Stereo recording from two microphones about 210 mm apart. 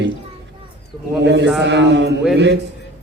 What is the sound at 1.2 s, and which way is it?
Speech, 55° right (ahead or behind).